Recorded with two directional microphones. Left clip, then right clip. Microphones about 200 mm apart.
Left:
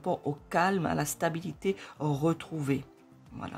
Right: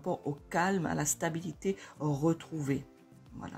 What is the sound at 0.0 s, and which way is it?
Speech, 30° left (ahead or behind).